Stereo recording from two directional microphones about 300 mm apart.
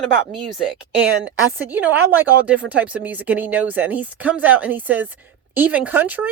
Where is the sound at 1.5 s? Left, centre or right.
Centre.